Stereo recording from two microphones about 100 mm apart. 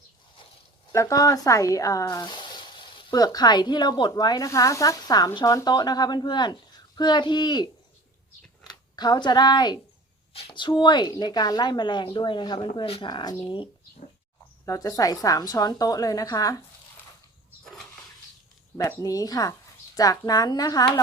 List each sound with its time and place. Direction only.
0.9 s speech: 35° left (ahead or behind)
2.1 s sizzle: 45° left (ahead or behind)
3.2 s a woman's voice: 40° left (ahead or behind)
9.0 s a woman's voice: 45° left (ahead or behind)
10.3 s a woman's voice: 60° left (ahead or behind)
12.8 s speech: 70° left (ahead or behind)
13.1 s a woman's voice: 50° left (ahead or behind)
14.6 s speech: 40° left (ahead or behind)
18.9 s speech: 35° left (ahead or behind)